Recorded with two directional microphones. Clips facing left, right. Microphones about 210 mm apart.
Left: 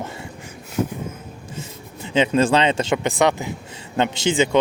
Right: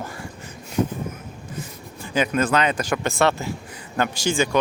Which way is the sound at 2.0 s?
25° left (ahead or behind).